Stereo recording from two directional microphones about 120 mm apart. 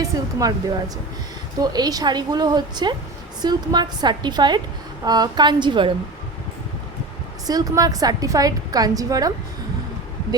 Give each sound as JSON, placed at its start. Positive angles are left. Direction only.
{"t": 0.0, "sound": "speech", "side_deg": -30}
{"t": 1.5, "sound": "a woman's voice", "side_deg": -35}
{"t": 7.4, "sound": "a woman's voice", "side_deg": -30}